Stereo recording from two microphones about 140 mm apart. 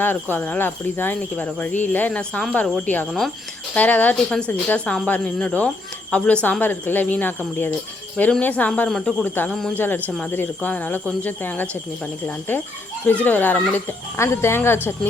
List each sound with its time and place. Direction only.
0.0 s speech: 15° left (ahead or behind)
3.1 s a man's voice: centre (ahead or behind)
9.5 s a man's voice: 5° left (ahead or behind)
9.7 s speech: 15° left (ahead or behind)